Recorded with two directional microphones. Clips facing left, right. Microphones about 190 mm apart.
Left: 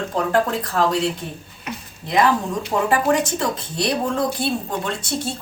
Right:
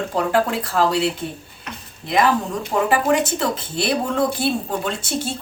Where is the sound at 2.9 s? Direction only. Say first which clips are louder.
Even; 5° right (ahead or behind).